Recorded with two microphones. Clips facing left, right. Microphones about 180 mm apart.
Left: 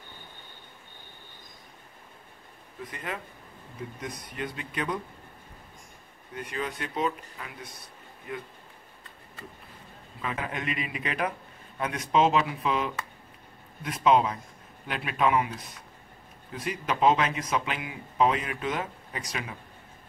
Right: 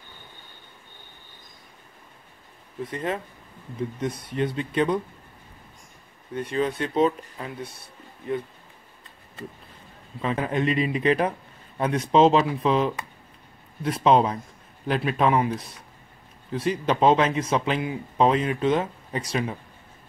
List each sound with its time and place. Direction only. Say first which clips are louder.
2.8 s speech: right 8 dB; 30° right (ahead or behind)
6.3 s speech: right 8 dB; 30° right (ahead or behind)
10.2 s speech: right 8 dB; 30° right (ahead or behind)
16.5 s speech: right 7 dB; 30° right (ahead or behind)